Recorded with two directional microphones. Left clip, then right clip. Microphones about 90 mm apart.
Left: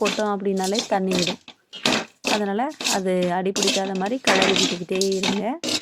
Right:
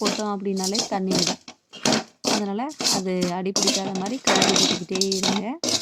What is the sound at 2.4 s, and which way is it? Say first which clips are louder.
Speech: left 2 dB; 25° left (ahead or behind).